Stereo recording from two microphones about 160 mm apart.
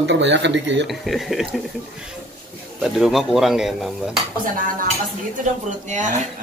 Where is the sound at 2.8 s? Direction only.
Centre (ahead or behind).